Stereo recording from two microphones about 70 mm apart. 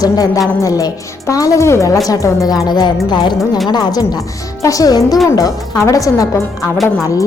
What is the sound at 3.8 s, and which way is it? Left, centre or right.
Speech, left.